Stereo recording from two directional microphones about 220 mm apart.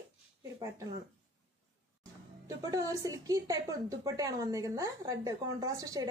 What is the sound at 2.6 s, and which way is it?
A woman's voice, 15° right (ahead or behind).